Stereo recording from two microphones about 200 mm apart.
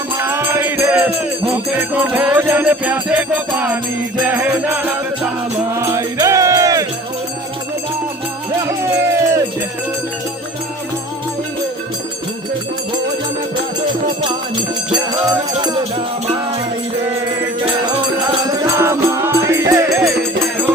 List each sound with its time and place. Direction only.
0.2 s music: 15° right (ahead or behind)
4.2 s jingle bell: 10° right (ahead or behind)
5.7 s music: 15° right (ahead or behind)
8.6 s music: 15° right (ahead or behind)
15.8 s music: 30° right (ahead or behind)
18.4 s music: 15° right (ahead or behind)